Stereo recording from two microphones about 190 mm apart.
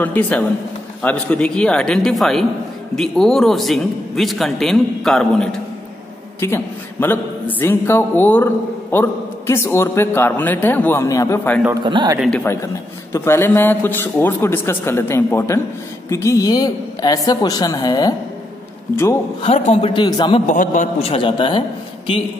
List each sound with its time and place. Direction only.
0.0 s a man's voice: 10° left (ahead or behind)
11.8 s a man's voice: 25° right (ahead or behind)
13.1 s a man's voice: 15° left (ahead or behind)
19.4 s a woman's voice: 35° left (ahead or behind)
20.5 s a woman's voice: 45° left (ahead or behind); by 22.2 s 25° left (ahead or behind)